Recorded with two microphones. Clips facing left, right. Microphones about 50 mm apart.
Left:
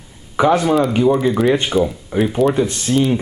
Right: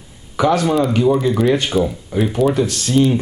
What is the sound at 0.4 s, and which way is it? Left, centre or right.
Speech, centre.